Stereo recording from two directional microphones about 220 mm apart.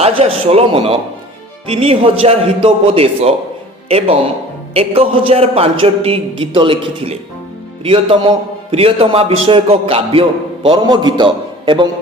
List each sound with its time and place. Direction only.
0.0 s a man's voice: 25° right (ahead or behind)